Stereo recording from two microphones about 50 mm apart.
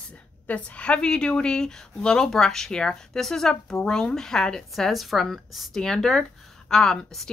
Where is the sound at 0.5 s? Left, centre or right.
Left.